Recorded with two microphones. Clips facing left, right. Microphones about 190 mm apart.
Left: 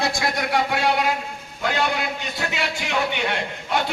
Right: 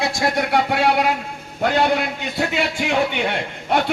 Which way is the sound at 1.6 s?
55° right (ahead or behind).